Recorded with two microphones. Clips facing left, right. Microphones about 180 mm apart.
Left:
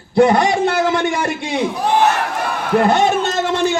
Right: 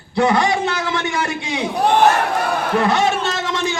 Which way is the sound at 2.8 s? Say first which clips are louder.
Left 5 dB; 50° left (ahead or behind).